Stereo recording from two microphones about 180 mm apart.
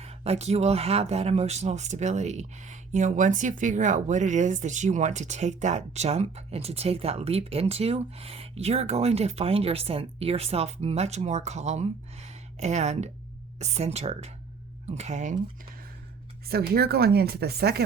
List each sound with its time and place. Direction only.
0.0 s speech: 35° right (ahead or behind)
16.5 s speech: 60° right (ahead or behind)